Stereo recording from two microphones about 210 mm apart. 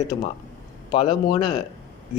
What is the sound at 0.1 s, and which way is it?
Speech, 35° left (ahead or behind).